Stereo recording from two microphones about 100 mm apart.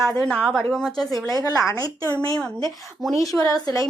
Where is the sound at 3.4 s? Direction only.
35° left (ahead or behind).